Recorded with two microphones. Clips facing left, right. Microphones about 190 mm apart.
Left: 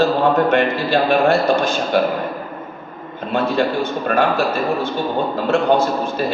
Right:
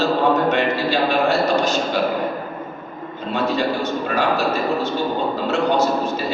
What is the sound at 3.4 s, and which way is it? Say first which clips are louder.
Speech: left 1 dB; 55° left (ahead or behind).